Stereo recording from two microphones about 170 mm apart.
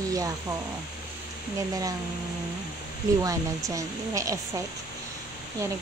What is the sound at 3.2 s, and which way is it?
Speech, 20° right (ahead or behind).